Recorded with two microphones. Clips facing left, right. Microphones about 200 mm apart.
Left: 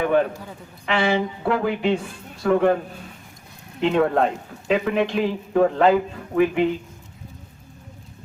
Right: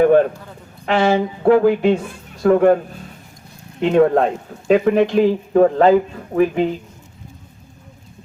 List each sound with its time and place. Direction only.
0.0 s a woman's voice: 45° right (ahead or behind)
3.8 s a woman's voice: 45° right (ahead or behind)